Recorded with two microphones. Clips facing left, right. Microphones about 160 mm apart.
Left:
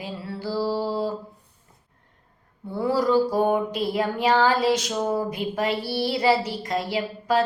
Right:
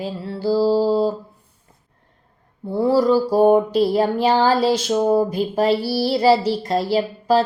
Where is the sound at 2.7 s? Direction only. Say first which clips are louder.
Right 5 dB; 30° right (ahead or behind).